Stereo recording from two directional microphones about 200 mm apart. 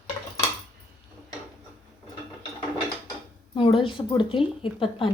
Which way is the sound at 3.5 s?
25° left (ahead or behind).